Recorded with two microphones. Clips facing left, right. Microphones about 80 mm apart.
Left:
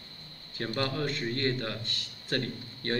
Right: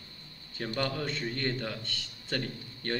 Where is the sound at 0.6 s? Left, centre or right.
Centre.